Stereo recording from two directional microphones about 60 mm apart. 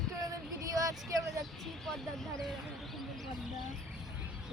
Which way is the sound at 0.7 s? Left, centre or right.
Right.